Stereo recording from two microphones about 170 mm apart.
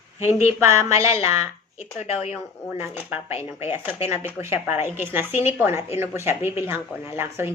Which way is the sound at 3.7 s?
10° right (ahead or behind).